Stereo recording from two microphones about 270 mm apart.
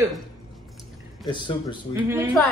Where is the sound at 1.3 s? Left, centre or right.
Centre.